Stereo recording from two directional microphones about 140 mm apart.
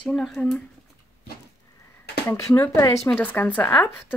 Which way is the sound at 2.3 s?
20° left (ahead or behind).